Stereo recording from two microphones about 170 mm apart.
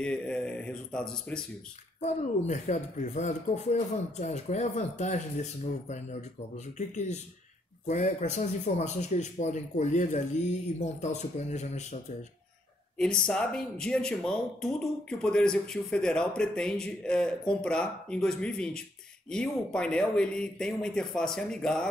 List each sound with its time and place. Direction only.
0.0 s speech: 5° left (ahead or behind)
2.0 s speech: 45° left (ahead or behind)
7.8 s speech: 45° left (ahead or behind)
12.9 s speech: 5° left (ahead or behind)